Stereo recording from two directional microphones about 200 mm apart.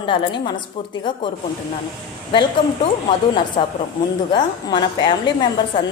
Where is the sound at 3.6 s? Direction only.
30° left (ahead or behind).